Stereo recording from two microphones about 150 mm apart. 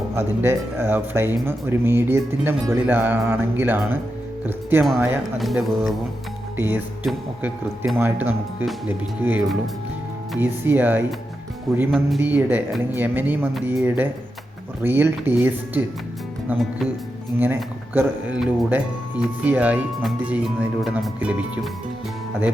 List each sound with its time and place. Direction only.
0.2 s speech: 15° right (ahead or behind)
5.4 s speech: centre (ahead or behind)
6.6 s speech: 15° right (ahead or behind)
10.4 s speech: 15° right (ahead or behind)
11.7 s speech: centre (ahead or behind)
12.2 s speech: 10° right (ahead or behind)